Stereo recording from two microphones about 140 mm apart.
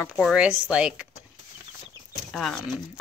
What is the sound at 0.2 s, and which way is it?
Speech, 5° right (ahead or behind).